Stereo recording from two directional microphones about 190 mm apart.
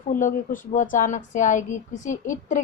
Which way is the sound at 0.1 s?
45° left (ahead or behind).